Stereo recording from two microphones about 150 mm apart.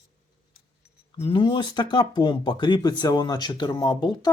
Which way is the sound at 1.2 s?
35° left (ahead or behind).